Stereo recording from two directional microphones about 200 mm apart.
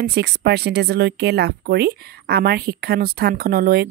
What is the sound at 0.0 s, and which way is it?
Speech, 55° right (ahead or behind).